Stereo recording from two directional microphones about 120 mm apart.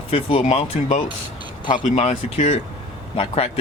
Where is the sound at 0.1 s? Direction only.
50° left (ahead or behind).